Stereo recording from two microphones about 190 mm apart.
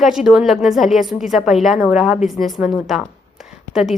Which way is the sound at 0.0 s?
Centre (ahead or behind).